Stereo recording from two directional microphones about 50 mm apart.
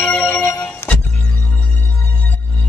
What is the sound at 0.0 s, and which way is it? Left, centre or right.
Telephone bell ringing, left.